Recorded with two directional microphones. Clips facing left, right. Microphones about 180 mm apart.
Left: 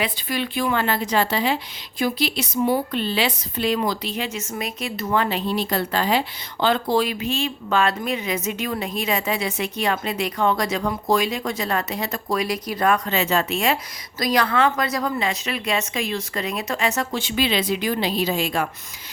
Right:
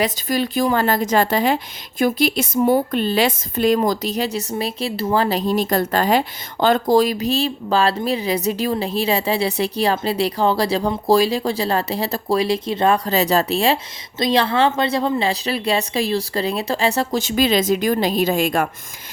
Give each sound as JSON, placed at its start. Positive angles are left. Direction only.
{"t": 0.0, "sound": "a woman's voice", "side_deg": -40}